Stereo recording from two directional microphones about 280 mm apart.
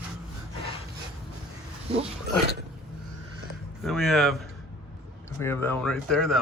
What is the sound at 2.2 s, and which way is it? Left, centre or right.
Speech, right.